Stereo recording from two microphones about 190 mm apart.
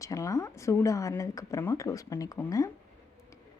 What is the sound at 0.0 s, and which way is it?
A woman's voice, 15° left (ahead or behind).